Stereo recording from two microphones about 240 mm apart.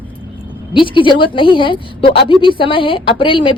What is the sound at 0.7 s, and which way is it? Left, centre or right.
Speech, left.